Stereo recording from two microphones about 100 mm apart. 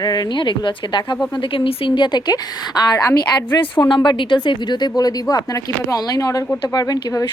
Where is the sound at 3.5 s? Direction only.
55° left (ahead or behind); by 7.3 s 40° left (ahead or behind).